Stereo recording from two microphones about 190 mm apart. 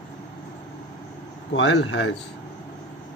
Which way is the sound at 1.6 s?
75° left (ahead or behind).